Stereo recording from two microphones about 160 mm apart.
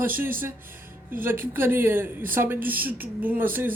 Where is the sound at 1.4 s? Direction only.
15° right (ahead or behind).